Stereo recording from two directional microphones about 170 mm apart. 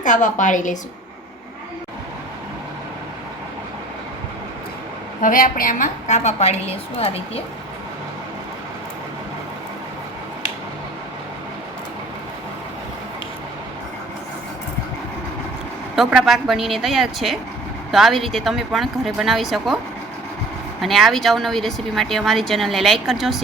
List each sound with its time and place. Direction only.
0.0 s a woman's voice: 50° left (ahead or behind)
5.2 s a woman's voice: 55° left (ahead or behind); by 7.4 s 35° left (ahead or behind)
16.0 s speech: centre (ahead or behind)
20.8 s speech: centre (ahead or behind)